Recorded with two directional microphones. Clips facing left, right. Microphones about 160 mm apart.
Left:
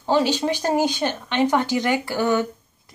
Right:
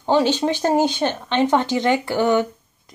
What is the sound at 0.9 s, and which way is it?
Speech, 20° right (ahead or behind).